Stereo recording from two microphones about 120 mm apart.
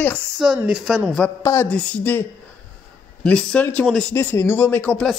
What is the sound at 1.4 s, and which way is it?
Speech, 20° left (ahead or behind).